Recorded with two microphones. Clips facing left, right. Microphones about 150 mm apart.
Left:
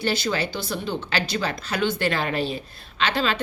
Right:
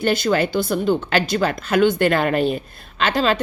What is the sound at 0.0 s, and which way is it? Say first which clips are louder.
A woman's voice: right 6 dB; 50° right (ahead or behind).